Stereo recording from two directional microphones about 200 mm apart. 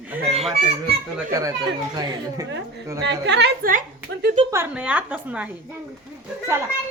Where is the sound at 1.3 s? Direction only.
20° right (ahead or behind).